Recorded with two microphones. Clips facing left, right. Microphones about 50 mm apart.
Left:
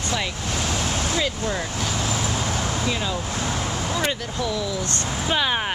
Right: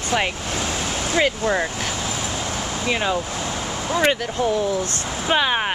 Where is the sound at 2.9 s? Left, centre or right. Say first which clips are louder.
Right 4 dB; right.